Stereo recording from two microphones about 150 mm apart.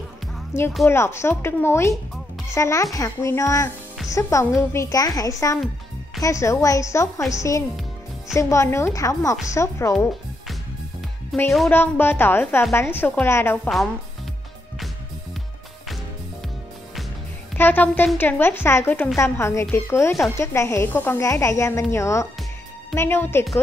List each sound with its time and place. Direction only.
0.5 s a woman's voice: 15° left (ahead or behind)
11.3 s speech: centre (ahead or behind)
11.7 s speech: 15° left (ahead or behind)
17.6 s a woman's voice: 10° left (ahead or behind)